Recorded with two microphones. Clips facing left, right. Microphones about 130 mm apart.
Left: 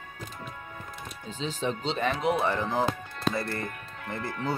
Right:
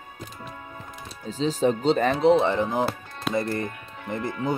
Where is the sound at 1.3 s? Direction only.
40° right (ahead or behind); by 2.8 s 20° right (ahead or behind).